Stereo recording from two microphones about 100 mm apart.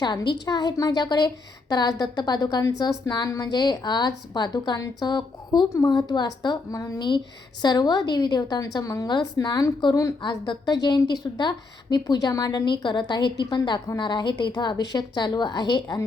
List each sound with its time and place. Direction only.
0.0 s a woman's voice: 45° left (ahead or behind)
10.2 s a woman's voice: 50° left (ahead or behind)